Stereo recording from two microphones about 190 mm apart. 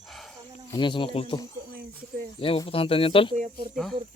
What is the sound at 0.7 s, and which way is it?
Speech, 25° left (ahead or behind).